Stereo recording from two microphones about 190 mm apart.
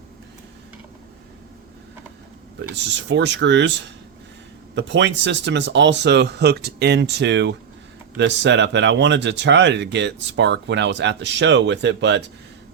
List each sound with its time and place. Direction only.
2.6 s speech: 65° right (ahead or behind)